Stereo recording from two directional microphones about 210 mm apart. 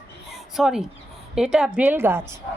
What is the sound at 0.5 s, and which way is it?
A woman's voice, centre (ahead or behind).